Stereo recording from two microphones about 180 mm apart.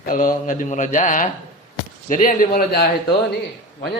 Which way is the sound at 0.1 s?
45° left (ahead or behind).